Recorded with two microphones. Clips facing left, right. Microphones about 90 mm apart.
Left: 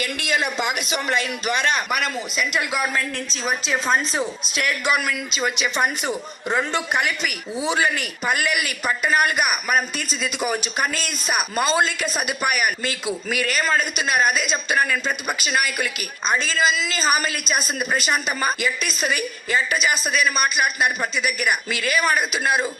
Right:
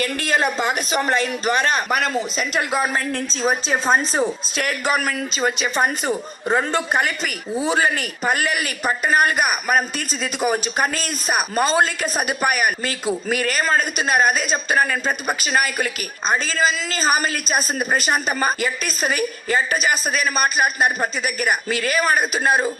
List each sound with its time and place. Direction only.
0.0 s a man's voice: 40° right (ahead or behind)